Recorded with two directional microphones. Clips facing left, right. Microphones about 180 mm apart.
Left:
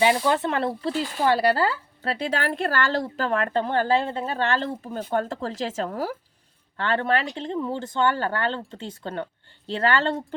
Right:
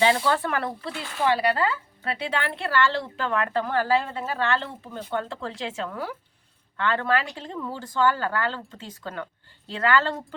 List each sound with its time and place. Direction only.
0.0 s speech: 15° left (ahead or behind)